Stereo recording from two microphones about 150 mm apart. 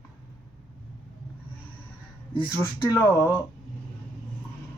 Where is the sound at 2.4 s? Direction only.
15° left (ahead or behind).